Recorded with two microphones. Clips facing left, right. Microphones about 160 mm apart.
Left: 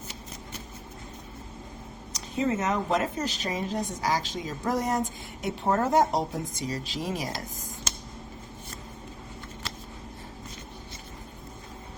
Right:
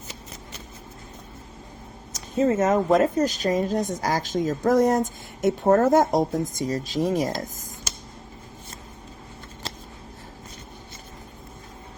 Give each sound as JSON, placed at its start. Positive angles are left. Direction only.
{"t": 2.4, "sound": "speech", "side_deg": -40}